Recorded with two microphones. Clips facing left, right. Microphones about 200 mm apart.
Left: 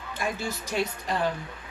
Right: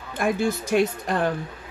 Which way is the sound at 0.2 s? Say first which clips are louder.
Right 9 dB; 55° right (ahead or behind).